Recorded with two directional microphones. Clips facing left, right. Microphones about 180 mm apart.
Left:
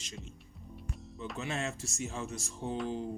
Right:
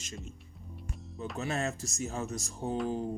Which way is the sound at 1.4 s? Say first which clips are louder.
Right 3 dB; 40° right (ahead or behind).